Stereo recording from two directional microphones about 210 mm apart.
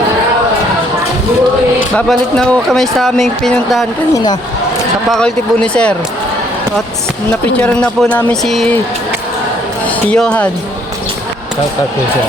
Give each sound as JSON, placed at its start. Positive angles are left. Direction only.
{"t": 2.0, "sound": "speech", "side_deg": 5}
{"t": 4.1, "sound": "speech", "side_deg": 20}
{"t": 5.0, "sound": "speech", "side_deg": 5}
{"t": 7.5, "sound": "speech", "side_deg": 5}
{"t": 9.8, "sound": "speech", "side_deg": 5}